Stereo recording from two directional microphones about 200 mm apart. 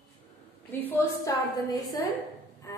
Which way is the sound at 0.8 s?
15° left (ahead or behind).